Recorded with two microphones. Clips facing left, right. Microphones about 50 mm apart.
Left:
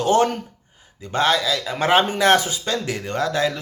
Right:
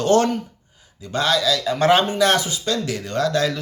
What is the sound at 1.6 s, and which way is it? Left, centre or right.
Speech, centre.